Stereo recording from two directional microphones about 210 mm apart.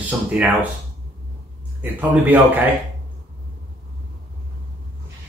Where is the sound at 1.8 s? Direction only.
10° right (ahead or behind).